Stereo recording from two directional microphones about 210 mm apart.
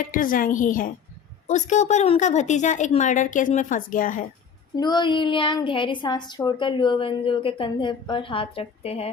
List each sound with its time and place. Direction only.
0.0 s a woman's voice: 40° left (ahead or behind)
4.8 s a woman's voice: 20° left (ahead or behind)